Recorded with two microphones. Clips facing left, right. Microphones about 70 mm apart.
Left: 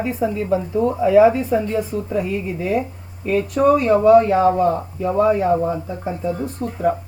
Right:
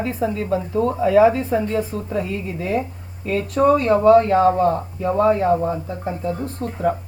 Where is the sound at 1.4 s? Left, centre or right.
Right.